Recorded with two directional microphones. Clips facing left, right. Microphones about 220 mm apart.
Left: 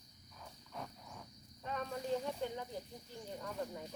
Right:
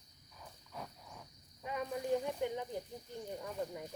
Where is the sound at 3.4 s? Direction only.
10° right (ahead or behind).